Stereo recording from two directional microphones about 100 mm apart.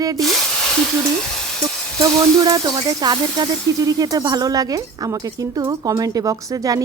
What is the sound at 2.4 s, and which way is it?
Speech, 40° right (ahead or behind).